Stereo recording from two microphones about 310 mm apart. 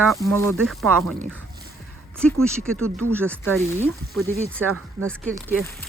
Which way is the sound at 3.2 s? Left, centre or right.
Centre.